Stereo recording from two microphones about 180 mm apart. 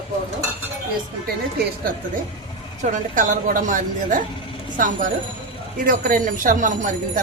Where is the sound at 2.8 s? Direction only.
45° right (ahead or behind).